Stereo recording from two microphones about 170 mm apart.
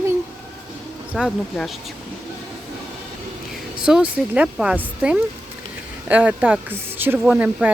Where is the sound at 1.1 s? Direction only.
Centre (ahead or behind).